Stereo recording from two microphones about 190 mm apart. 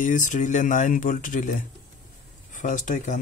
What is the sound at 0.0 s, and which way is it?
Speech, 40° left (ahead or behind).